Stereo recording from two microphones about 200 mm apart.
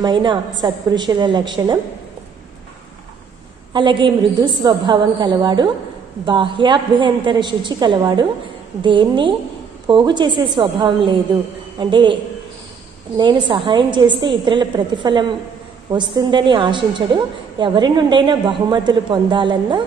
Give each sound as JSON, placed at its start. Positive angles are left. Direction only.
{"t": 0.0, "sound": "a woman's voice", "side_deg": -25}
{"t": 3.7, "sound": "a woman's voice", "side_deg": -25}
{"t": 13.2, "sound": "a woman's voice", "side_deg": -25}